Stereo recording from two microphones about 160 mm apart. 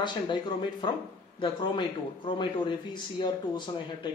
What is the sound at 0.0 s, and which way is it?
A man's voice, 30° left (ahead or behind).